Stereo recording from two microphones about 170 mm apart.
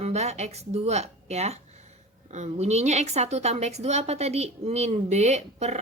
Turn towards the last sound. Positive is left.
turn(degrees=-40)  # may be behind; listen again after turning